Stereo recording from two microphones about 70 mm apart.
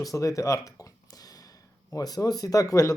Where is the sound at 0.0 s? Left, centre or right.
Left.